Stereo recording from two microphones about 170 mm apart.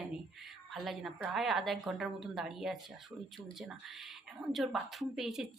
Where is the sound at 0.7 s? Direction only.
Centre (ahead or behind).